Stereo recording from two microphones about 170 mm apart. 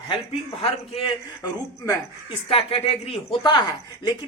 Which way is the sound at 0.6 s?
25° left (ahead or behind).